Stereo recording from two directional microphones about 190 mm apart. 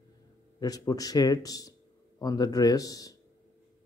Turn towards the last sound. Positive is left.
turn(degrees=20)  # may be behind; listen again after turning